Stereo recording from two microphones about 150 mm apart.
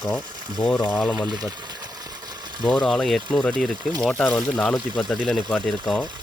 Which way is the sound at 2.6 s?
5° left (ahead or behind).